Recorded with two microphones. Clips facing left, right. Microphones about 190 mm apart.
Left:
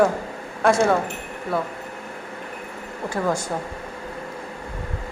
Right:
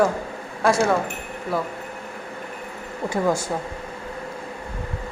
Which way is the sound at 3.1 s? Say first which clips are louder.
Right 2 dB; 10° right (ahead or behind).